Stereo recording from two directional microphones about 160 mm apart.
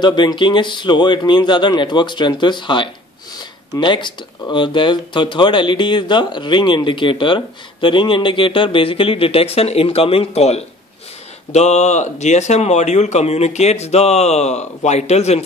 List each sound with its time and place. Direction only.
0.0 s speech: 30° left (ahead or behind); by 15.4 s 45° left (ahead or behind)